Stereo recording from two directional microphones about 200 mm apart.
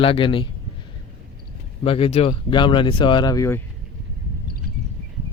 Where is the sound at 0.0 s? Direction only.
25° left (ahead or behind).